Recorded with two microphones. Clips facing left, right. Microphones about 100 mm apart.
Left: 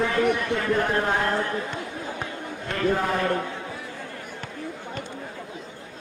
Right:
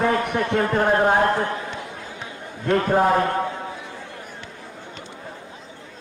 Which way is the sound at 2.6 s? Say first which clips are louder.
Right 6 dB; 45° right (ahead or behind).